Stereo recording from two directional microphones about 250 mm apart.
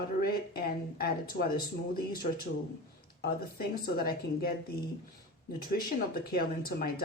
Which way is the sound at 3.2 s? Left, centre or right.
Left.